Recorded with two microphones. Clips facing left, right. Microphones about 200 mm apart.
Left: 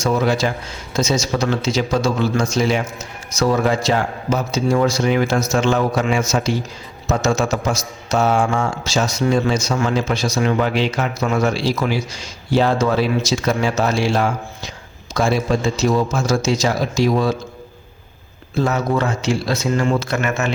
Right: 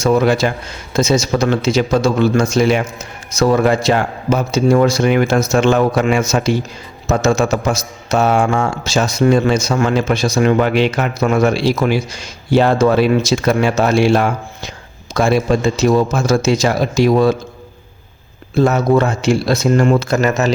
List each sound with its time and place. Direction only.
0.0 s a man's voice: 60° right (ahead or behind)
18.9 s a man's voice: 65° right (ahead or behind)
20.1 s speech: 40° right (ahead or behind)